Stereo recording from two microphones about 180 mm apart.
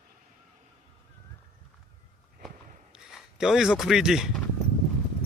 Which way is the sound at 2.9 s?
5° right (ahead or behind).